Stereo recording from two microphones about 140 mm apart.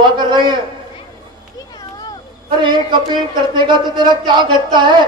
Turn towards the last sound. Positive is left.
turn(degrees=-35)  # may be behind; listen again after turning